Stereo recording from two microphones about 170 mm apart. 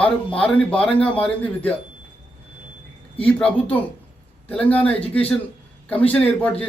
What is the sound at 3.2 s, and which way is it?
A man's voice, 10° left (ahead or behind).